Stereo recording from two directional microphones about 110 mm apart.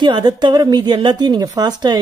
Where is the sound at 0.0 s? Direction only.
40° right (ahead or behind).